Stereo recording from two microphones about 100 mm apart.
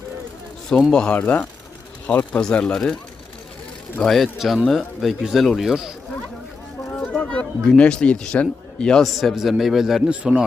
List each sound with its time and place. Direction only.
0.7 s speech: 10° left (ahead or behind)
4.0 s speech: 5° left (ahead or behind)
7.0 s a man's voice: 10° left (ahead or behind); by 10.4 s 10° right (ahead or behind)